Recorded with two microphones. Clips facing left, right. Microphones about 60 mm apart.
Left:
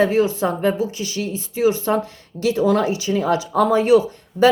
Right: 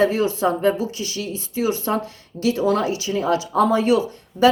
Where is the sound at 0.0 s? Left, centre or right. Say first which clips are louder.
Left 1 dB; left.